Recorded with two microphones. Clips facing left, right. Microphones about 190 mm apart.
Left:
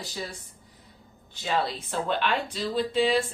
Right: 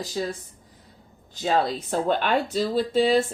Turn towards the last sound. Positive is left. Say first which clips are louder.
# right 4 dB
turn(degrees=-40)  # may be behind; listen again after turning